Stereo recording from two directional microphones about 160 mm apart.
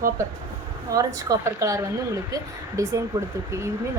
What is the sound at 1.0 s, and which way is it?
A woman's voice, 20° right (ahead or behind).